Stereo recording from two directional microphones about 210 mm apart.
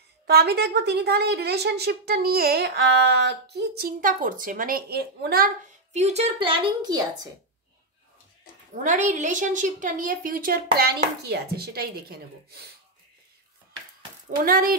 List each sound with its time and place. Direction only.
0.3 s a woman's voice: 50° right (ahead or behind)
5.9 s a woman's voice: 30° right (ahead or behind)
8.8 s a woman's voice: 35° right (ahead or behind)
14.4 s a woman's voice: 45° right (ahead or behind)